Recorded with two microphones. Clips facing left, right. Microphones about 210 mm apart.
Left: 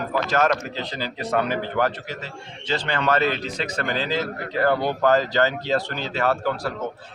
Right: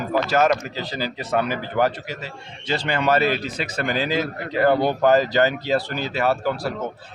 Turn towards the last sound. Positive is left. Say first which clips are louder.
# right 1 dB
turn(degrees=-10)  # may be behind; listen again after turning